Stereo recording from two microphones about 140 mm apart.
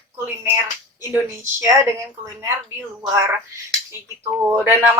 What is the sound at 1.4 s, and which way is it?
Speech, 20° right (ahead or behind).